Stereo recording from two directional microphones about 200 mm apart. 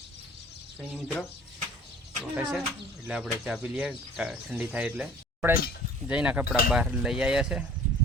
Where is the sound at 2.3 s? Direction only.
5° right (ahead or behind).